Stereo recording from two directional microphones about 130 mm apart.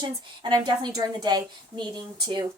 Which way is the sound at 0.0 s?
35° right (ahead or behind).